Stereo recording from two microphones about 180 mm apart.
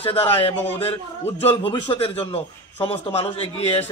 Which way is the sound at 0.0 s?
30° left (ahead or behind).